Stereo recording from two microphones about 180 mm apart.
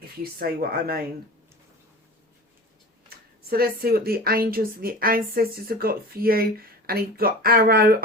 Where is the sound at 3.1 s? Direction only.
60° right (ahead or behind).